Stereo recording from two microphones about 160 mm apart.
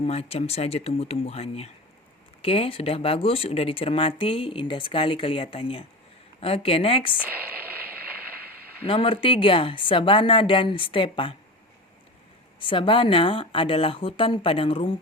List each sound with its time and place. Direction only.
0.0 s speech: 40° left (ahead or behind)
7.2 s speech: 10° right (ahead or behind)
8.9 s speech: 35° left (ahead or behind)
12.5 s speech: 30° left (ahead or behind)